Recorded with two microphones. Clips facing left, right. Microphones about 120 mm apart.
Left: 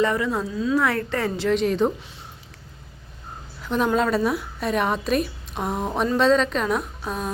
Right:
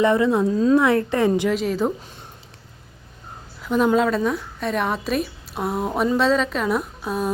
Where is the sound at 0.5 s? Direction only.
40° right (ahead or behind).